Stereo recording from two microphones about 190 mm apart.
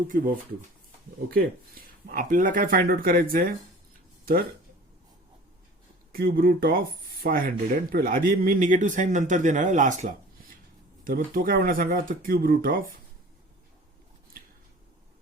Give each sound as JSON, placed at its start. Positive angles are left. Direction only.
{"t": 0.1, "sound": "speech", "side_deg": -50}
{"t": 6.1, "sound": "speech", "side_deg": -50}